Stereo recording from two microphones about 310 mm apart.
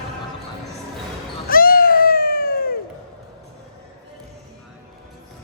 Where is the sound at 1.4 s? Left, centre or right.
Left.